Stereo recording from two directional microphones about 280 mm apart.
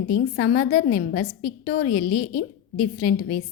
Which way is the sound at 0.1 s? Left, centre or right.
Left.